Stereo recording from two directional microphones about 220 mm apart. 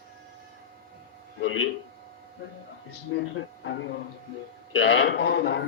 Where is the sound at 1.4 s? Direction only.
65° left (ahead or behind).